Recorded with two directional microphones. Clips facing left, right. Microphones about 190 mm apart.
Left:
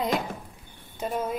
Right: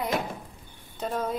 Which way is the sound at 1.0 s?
10° left (ahead or behind).